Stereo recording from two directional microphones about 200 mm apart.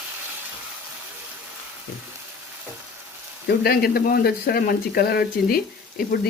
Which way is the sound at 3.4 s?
50° left (ahead or behind).